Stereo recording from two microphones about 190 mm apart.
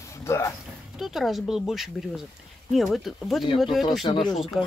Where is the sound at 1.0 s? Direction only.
Centre (ahead or behind).